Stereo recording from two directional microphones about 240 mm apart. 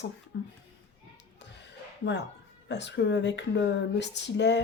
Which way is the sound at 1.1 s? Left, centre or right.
Left.